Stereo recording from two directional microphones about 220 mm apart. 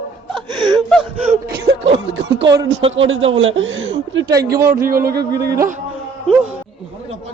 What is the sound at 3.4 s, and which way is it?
Speech, 60° right (ahead or behind).